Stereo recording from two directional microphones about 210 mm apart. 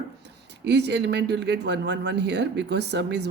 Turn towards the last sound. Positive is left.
turn(degrees=-55)  # may be behind; listen again after turning